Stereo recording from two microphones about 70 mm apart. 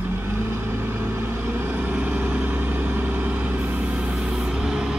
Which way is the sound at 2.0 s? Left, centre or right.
Right.